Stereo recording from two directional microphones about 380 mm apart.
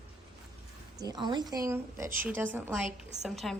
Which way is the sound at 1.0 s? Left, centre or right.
Centre.